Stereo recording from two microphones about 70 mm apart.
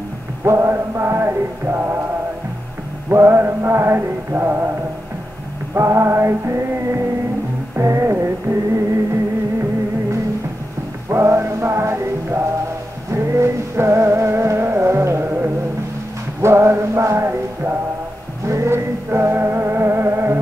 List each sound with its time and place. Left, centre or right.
0.4 s music: right
3.1 s music: right
5.8 s music: right
11.1 s music: right